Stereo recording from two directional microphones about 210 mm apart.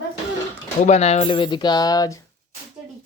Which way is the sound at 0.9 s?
30° left (ahead or behind).